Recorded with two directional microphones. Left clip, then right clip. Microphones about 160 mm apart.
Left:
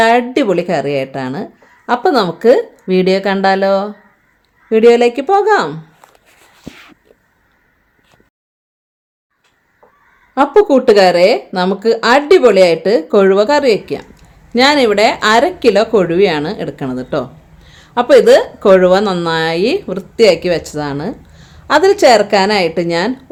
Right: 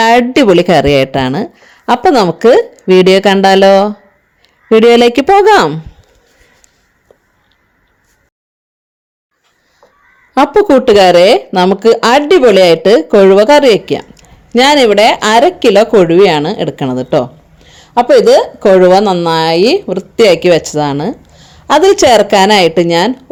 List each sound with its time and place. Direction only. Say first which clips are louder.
0.0 s speech: right 4 dB; 55° right (ahead or behind)
10.3 s speech: right 3 dB; 55° right (ahead or behind); by 20.1 s 25° right (ahead or behind)
20.1 s speech: right 4 dB; 40° right (ahead or behind)